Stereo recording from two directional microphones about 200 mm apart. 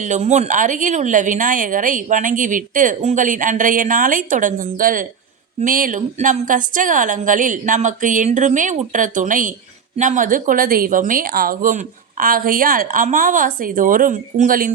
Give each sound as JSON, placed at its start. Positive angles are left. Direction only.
{"t": 0.0, "sound": "speech", "side_deg": -35}